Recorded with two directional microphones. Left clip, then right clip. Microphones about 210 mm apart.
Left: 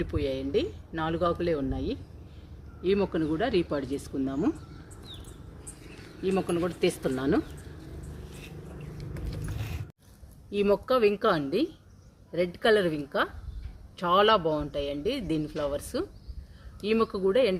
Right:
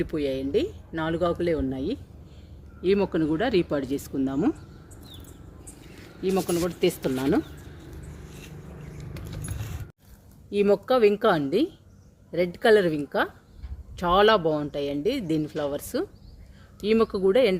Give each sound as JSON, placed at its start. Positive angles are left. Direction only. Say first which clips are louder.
{"t": 0.0, "sound": "speech", "louder": "right 3 dB", "side_deg": -35}
{"t": 6.2, "sound": "speech", "louder": "right 3 dB", "side_deg": -35}
{"t": 10.5, "sound": "speech", "louder": "right 3 dB", "side_deg": -30}